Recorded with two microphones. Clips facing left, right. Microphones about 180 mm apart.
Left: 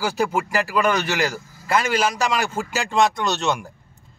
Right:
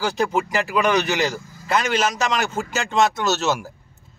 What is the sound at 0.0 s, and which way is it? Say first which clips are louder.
Speech: right 1 dB; 5° left (ahead or behind).